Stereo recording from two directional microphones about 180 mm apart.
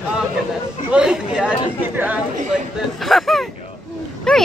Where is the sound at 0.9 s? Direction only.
5° right (ahead or behind).